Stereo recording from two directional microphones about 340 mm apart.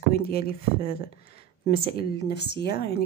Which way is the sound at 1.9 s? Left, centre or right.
Left.